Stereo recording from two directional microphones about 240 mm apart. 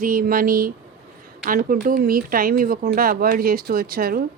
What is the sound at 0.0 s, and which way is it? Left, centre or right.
A woman's voice, right.